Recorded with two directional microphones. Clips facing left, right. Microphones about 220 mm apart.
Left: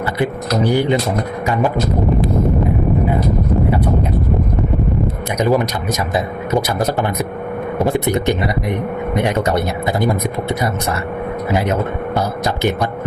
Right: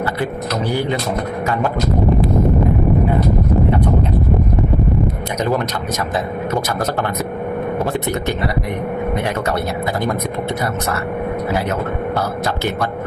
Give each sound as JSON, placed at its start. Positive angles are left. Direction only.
{"t": 0.2, "sound": "speech", "side_deg": 15}
{"t": 5.4, "sound": "speech", "side_deg": 15}
{"t": 11.5, "sound": "speech", "side_deg": 15}